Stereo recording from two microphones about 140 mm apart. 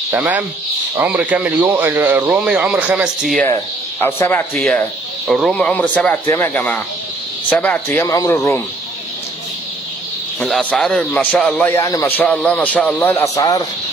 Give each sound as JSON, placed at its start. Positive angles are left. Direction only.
{"t": 0.1, "sound": "speech", "side_deg": -15}
{"t": 3.4, "sound": "speech", "side_deg": 20}
{"t": 5.2, "sound": "speech", "side_deg": 0}
{"t": 8.1, "sound": "speech", "side_deg": 20}
{"t": 10.5, "sound": "a man's voice", "side_deg": 5}
{"t": 11.7, "sound": "speech", "side_deg": 20}
{"t": 12.2, "sound": "speech", "side_deg": 5}